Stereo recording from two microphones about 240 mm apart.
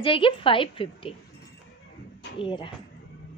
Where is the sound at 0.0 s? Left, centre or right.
Left.